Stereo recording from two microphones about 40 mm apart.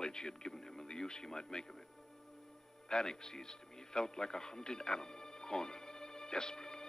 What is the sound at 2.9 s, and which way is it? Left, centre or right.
Music, centre.